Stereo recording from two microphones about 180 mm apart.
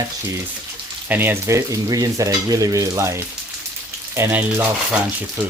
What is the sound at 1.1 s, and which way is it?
Stir, 10° right (ahead or behind).